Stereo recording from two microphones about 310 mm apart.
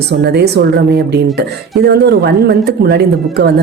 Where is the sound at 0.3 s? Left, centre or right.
Right.